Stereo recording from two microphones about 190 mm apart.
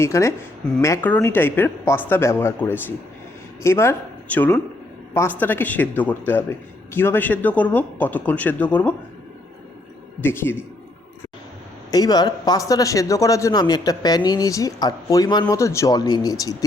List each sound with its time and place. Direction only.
0.0 s speech: 15° left (ahead or behind)
10.2 s speech: 10° left (ahead or behind)
11.9 s speech: 20° left (ahead or behind)